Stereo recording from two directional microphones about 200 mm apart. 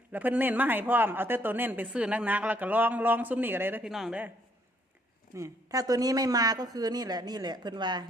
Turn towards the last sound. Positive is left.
turn(degrees=-20)  # may be behind; listen again after turning